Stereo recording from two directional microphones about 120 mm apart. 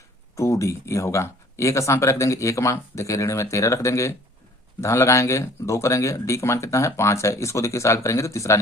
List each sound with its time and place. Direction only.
0.3 s speech: 25° left (ahead or behind)